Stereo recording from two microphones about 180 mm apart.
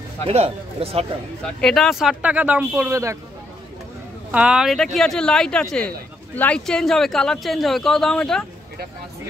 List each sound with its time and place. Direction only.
0.3 s speech: 35° right (ahead or behind)
1.4 s speech: 5° left (ahead or behind); by 3.2 s 15° right (ahead or behind)
4.3 s speech: 5° right (ahead or behind)